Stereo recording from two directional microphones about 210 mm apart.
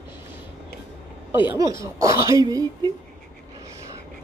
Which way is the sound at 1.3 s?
10° right (ahead or behind).